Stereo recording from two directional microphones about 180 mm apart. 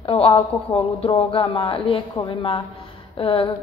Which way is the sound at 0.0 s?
30° left (ahead or behind).